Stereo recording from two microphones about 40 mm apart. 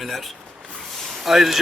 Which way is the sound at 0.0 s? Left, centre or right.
Centre.